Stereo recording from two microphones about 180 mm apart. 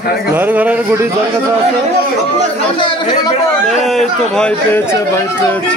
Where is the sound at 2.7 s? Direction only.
25° left (ahead or behind).